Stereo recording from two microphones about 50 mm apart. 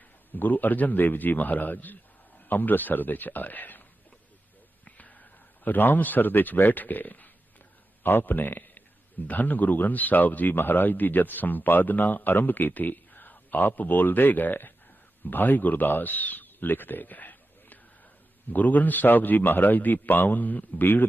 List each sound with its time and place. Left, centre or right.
0.3 s speech: left
4.9 s a sound: left
5.6 s a man's voice: left